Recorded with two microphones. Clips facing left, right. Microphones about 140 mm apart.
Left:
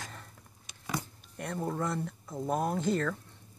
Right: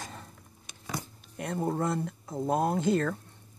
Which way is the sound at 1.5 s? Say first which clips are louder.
Right 4 dB; 25° right (ahead or behind).